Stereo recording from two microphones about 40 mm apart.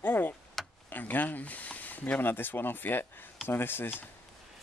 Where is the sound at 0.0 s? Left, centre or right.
Left.